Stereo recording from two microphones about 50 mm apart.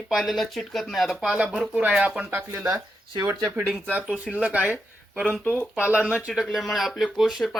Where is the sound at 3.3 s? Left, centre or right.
Right.